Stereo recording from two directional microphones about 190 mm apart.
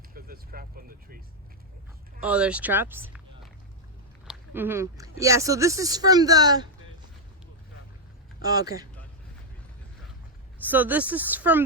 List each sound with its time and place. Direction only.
0.1 s speech: 50° right (ahead or behind)
2.2 s speech: 5° right (ahead or behind)
4.3 s speech: 10° right (ahead or behind)
8.4 s speech: 20° right (ahead or behind)
10.7 s speech: 10° right (ahead or behind)